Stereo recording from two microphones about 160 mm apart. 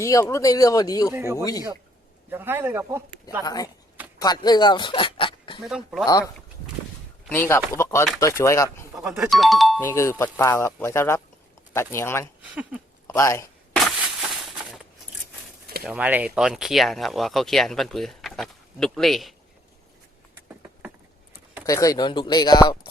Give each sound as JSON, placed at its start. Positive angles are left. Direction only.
{"t": 0.0, "sound": "speech", "side_deg": 20}
{"t": 1.1, "sound": "a man's voice", "side_deg": -15}
{"t": 3.4, "sound": "speech", "side_deg": 25}
{"t": 5.6, "sound": "speech", "side_deg": 0}
{"t": 7.3, "sound": "speech", "side_deg": 15}
{"t": 9.0, "sound": "speech", "side_deg": 0}
{"t": 9.8, "sound": "speech", "side_deg": 20}
{"t": 12.4, "sound": "speech", "side_deg": -10}
{"t": 13.1, "sound": "speech", "side_deg": 20}
{"t": 13.7, "sound": "a sound", "side_deg": 0}
{"t": 15.8, "sound": "speech", "side_deg": -10}
{"t": 21.7, "sound": "speech", "side_deg": 20}